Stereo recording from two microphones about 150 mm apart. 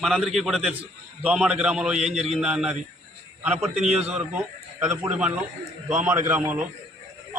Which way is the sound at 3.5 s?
50° right (ahead or behind).